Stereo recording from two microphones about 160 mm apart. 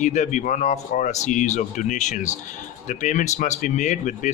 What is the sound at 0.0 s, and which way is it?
Speech, 50° left (ahead or behind).